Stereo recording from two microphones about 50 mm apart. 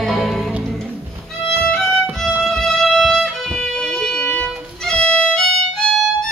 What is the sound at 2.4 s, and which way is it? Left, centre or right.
Music, centre.